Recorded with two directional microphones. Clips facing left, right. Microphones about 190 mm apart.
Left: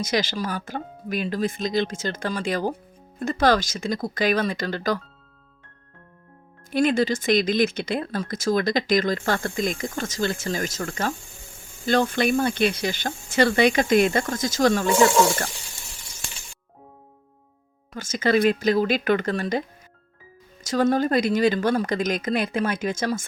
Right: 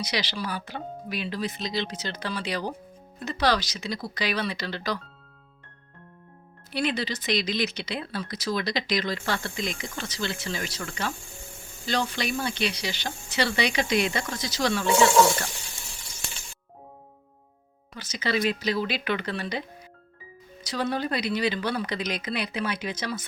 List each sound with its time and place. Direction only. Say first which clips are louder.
0.0 s speech: left 6 dB; 45° left (ahead or behind)
6.7 s speech: left 8 dB; 45° left (ahead or behind)
17.9 s speech: left 7 dB; 50° left (ahead or behind)
20.7 s speech: left 7 dB; 45° left (ahead or behind)